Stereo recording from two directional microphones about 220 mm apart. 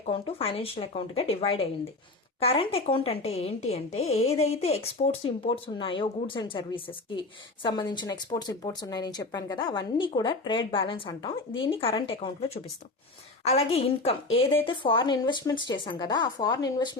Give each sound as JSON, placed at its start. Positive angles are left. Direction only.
{"t": 0.0, "sound": "speech", "side_deg": 25}
{"t": 13.4, "sound": "speech", "side_deg": 30}